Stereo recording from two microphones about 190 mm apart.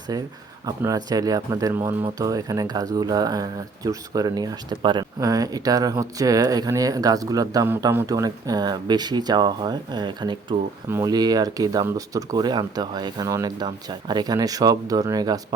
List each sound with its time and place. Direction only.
0.1 s speech: 20° right (ahead or behind)